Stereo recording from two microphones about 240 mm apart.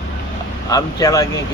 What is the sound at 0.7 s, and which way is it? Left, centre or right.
Speech, centre.